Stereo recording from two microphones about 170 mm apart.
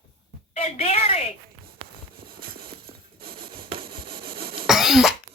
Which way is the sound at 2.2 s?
60° right (ahead or behind).